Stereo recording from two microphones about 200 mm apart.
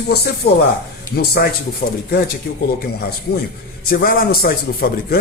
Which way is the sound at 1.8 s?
65° left (ahead or behind).